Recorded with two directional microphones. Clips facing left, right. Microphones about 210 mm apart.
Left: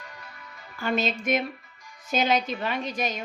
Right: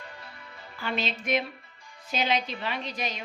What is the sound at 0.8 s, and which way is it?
A woman's voice, 45° left (ahead or behind).